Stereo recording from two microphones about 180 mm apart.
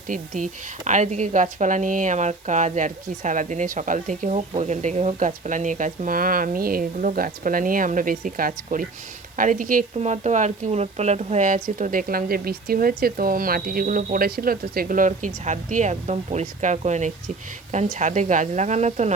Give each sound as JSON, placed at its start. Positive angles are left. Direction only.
{"t": 0.1, "sound": "speech", "side_deg": -45}